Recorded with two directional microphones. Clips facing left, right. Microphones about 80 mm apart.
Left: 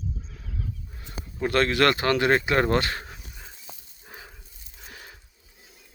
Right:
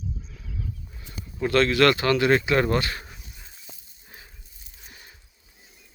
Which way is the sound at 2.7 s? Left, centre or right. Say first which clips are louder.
Left 1 dB; left.